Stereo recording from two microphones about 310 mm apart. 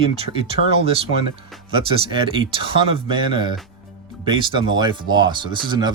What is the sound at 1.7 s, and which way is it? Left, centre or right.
Speech, centre.